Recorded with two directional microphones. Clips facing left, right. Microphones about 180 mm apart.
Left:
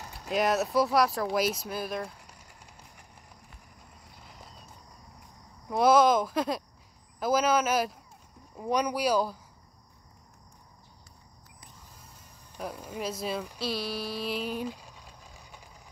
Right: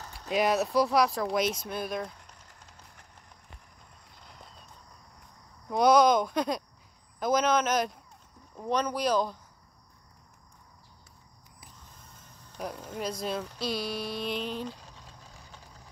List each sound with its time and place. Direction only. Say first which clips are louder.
0.3 s speech: even; centre (ahead or behind)
4.2 s a sound: even; 5° left (ahead or behind)
5.7 s speech: even; 5° left (ahead or behind)
12.5 s speech: even; centre (ahead or behind)